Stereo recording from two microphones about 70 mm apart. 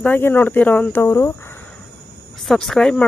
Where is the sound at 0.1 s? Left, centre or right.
Left.